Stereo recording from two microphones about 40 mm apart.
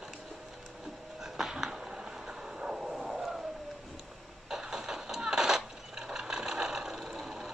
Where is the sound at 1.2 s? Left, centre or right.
Centre.